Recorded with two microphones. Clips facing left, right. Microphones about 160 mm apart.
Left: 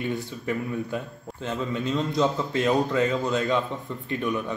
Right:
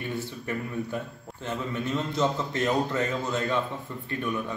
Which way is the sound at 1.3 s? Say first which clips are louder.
Left 4 dB; centre (ahead or behind).